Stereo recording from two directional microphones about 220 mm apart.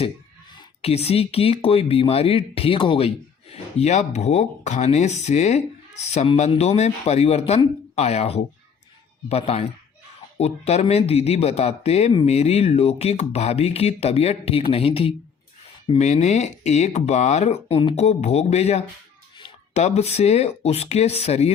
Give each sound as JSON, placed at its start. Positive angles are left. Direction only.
{"t": 0.5, "sound": "speech", "side_deg": 25}